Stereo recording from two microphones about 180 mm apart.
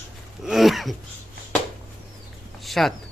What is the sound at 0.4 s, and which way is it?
Speech, centre (ahead or behind).